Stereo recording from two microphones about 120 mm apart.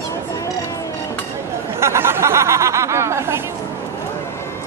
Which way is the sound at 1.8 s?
20° right (ahead or behind).